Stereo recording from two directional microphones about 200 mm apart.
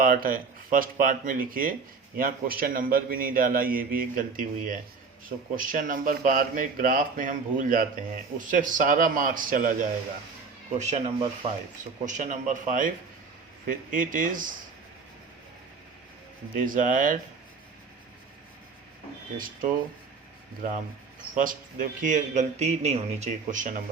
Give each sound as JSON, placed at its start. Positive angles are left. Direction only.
{"t": 0.0, "sound": "a man's voice", "side_deg": -45}
{"t": 16.6, "sound": "speech", "side_deg": -40}
{"t": 21.3, "sound": "speech", "side_deg": -40}